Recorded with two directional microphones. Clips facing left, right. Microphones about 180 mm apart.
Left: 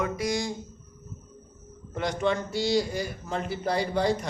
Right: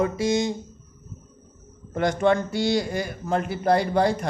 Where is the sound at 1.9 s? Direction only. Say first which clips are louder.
Right 6 dB; 55° right (ahead or behind).